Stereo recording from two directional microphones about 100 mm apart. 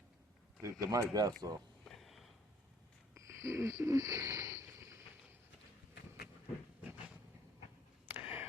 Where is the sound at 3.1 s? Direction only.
30° right (ahead or behind).